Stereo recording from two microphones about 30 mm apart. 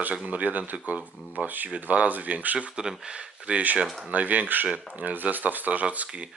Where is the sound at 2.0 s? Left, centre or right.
Right.